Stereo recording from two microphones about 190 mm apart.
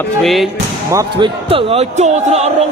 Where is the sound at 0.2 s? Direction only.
Centre (ahead or behind).